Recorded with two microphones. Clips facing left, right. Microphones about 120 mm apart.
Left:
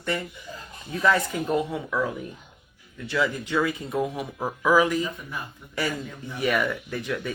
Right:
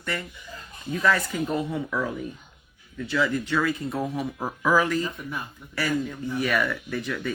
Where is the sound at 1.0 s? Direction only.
20° left (ahead or behind).